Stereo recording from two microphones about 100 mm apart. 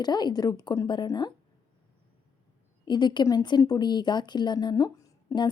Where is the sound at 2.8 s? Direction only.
50° left (ahead or behind).